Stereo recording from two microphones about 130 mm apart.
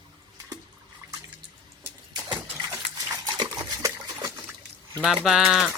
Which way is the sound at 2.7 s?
25° right (ahead or behind).